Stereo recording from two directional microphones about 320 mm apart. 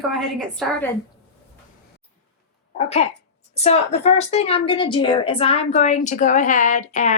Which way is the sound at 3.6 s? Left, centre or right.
Centre.